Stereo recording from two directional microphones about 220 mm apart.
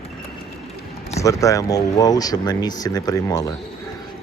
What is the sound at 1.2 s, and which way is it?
A man's voice, 15° left (ahead or behind).